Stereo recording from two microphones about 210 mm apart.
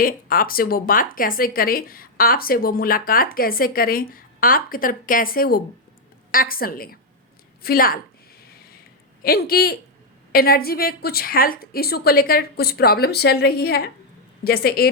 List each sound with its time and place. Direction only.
0.0 s speech: 40° left (ahead or behind)
7.6 s a sound: 45° left (ahead or behind)
9.2 s speech: 45° left (ahead or behind)